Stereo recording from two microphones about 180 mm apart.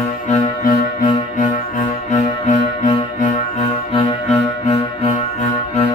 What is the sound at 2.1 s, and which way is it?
Music, 40° left (ahead or behind).